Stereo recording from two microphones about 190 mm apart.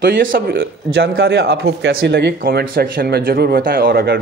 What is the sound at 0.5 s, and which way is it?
A man's voice, 65° right (ahead or behind).